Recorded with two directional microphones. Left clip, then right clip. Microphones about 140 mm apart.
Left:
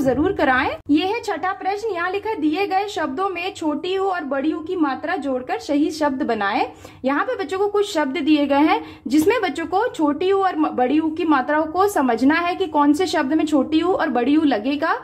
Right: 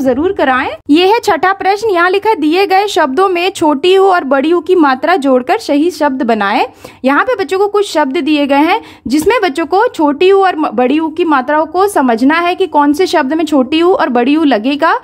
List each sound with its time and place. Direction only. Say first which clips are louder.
0.0 s a woman's voice: right 7 dB; 35° right (ahead or behind)
0.8 s speech: right 12 dB; 70° right (ahead or behind); by 15.0 s 45° right (ahead or behind)